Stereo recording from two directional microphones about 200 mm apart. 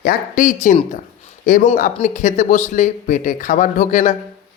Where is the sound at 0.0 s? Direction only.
45° left (ahead or behind).